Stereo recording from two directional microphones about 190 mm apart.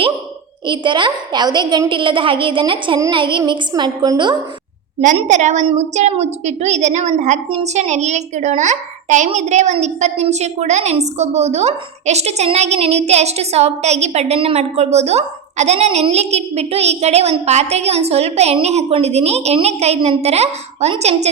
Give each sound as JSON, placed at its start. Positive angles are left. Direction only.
{"t": 0.7, "sound": "a woman's voice", "side_deg": -25}
{"t": 5.1, "sound": "a woman's voice", "side_deg": -40}